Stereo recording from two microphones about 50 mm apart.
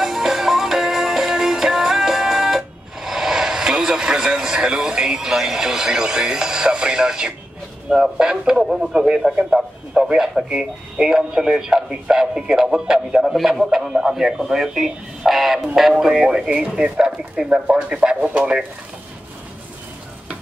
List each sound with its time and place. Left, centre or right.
0.0 s music: centre
7.9 s speech: centre